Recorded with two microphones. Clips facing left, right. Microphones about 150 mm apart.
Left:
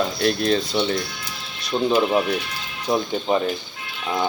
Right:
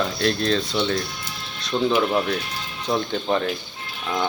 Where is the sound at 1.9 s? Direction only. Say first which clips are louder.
Left 3 dB; 15° left (ahead or behind).